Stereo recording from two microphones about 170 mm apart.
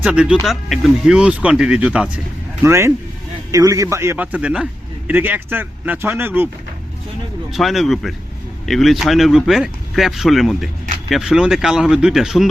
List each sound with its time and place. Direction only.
0.0 s a man's voice: 5° right (ahead or behind)
7.5 s speech: centre (ahead or behind)